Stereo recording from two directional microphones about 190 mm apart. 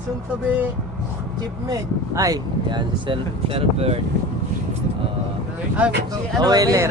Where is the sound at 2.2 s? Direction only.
20° right (ahead or behind).